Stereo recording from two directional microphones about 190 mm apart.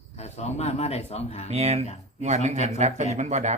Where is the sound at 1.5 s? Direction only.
35° right (ahead or behind).